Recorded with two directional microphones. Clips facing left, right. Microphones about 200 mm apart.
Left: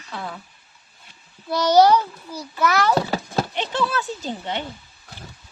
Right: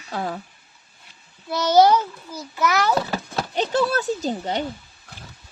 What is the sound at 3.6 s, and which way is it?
A child's voice, 40° right (ahead or behind).